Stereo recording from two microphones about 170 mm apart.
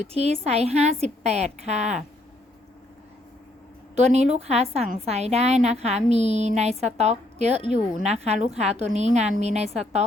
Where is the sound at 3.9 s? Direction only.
40° right (ahead or behind).